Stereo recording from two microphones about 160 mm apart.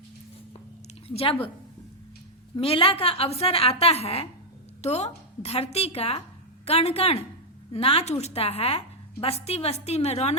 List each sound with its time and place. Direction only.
1.0 s a woman's voice: 35° left (ahead or behind)
2.6 s a woman's voice: 35° left (ahead or behind)